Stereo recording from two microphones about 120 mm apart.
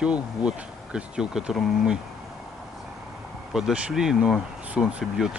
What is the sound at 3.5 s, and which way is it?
Speech, 5° right (ahead or behind).